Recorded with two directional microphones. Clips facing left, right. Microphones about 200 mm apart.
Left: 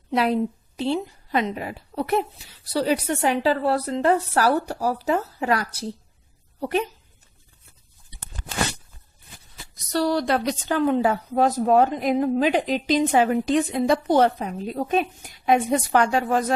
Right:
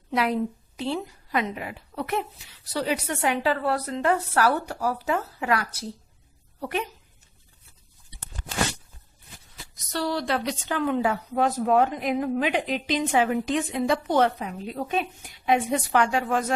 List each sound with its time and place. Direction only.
0.1 s a woman's voice: 30° left (ahead or behind)
9.7 s a woman's voice: 40° left (ahead or behind)